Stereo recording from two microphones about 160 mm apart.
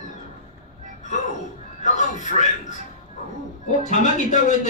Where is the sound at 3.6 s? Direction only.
50° left (ahead or behind).